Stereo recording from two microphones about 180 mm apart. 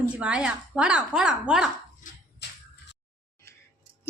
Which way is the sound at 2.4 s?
70° left (ahead or behind).